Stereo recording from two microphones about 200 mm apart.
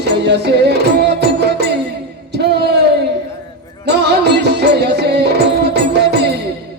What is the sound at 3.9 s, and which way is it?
Music, 55° right (ahead or behind).